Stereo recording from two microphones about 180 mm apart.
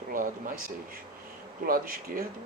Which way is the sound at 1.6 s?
55° right (ahead or behind).